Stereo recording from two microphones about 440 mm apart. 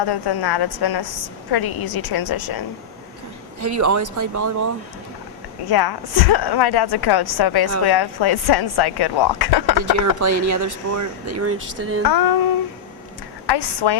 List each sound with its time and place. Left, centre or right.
0.0 s a woman's voice: left
3.6 s speech: right
5.6 s speech: left
10.0 s speech: right
12.0 s a woman's voice: left
13.5 s speech: left